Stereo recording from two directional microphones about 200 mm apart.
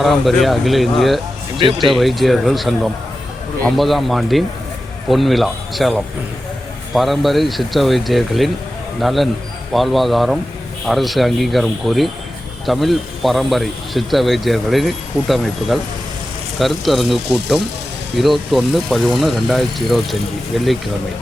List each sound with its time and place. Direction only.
0.0 s speech: centre (ahead or behind)
1.5 s speech: 25° right (ahead or behind)
1.9 s speech: centre (ahead or behind)